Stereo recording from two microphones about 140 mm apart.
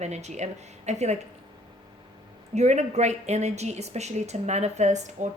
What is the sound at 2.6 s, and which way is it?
A woman's voice, 55° right (ahead or behind).